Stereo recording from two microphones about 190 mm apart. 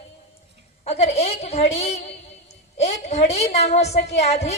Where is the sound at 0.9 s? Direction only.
35° left (ahead or behind).